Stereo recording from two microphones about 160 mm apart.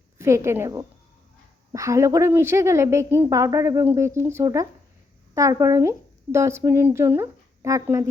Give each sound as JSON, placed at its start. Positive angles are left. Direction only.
{"t": 0.2, "sound": "a woman's voice", "side_deg": -15}